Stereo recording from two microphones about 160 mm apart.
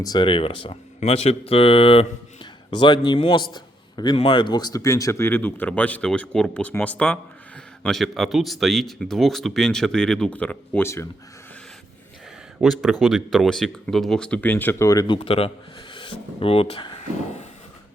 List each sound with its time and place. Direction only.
0.0 s speech: 25° left (ahead or behind)
12.5 s speech: centre (ahead or behind); by 16.9 s 35° left (ahead or behind)